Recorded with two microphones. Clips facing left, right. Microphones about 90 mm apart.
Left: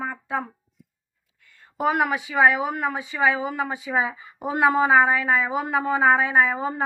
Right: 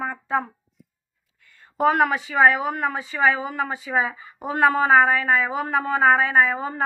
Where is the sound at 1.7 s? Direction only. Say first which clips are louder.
Right 3 dB; 5° left (ahead or behind).